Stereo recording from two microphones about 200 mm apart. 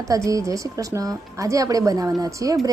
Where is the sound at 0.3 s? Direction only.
15° right (ahead or behind).